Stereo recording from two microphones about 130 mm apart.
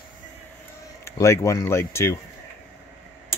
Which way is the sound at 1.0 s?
20° left (ahead or behind).